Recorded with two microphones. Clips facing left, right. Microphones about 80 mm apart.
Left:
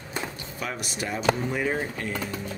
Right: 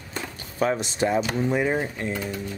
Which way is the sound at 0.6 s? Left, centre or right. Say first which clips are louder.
Right 10 dB; right.